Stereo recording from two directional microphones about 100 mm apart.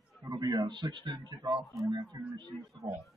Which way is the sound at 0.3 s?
40° right (ahead or behind).